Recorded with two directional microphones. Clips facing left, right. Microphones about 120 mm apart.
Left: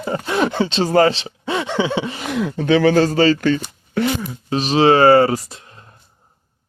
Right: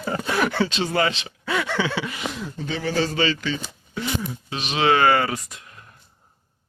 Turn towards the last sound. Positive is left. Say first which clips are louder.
# left 3 dB
turn(degrees=30)  # may be behind; listen again after turning